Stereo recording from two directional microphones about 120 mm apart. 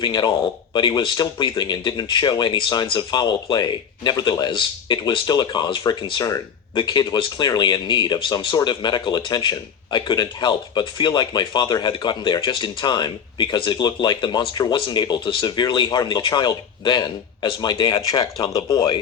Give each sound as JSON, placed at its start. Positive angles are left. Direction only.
{"t": 0.0, "sound": "speech", "side_deg": 40}